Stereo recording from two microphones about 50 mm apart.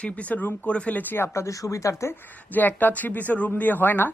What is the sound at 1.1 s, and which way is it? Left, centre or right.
Speech, left.